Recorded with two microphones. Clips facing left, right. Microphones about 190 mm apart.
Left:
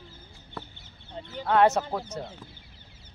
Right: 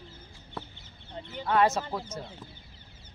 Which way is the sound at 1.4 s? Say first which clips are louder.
Left 3 dB; 65° left (ahead or behind).